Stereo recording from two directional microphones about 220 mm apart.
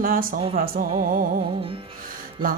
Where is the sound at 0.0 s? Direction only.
40° right (ahead or behind).